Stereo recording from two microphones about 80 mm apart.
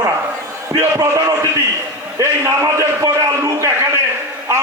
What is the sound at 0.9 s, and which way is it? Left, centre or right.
A man's voice, right.